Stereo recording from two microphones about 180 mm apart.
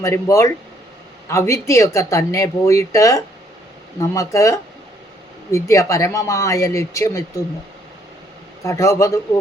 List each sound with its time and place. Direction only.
0.0 s speech: 15° left (ahead or behind)
8.6 s speech: 15° left (ahead or behind)